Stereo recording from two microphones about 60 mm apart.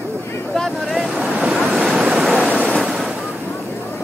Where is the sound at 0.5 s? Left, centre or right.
Centre.